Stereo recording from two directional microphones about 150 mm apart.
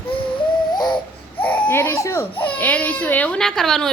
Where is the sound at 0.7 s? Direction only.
30° left (ahead or behind).